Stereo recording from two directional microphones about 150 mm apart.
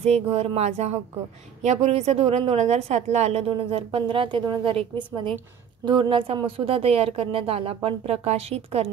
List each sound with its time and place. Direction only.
0.0 s a woman's voice: 45° right (ahead or behind)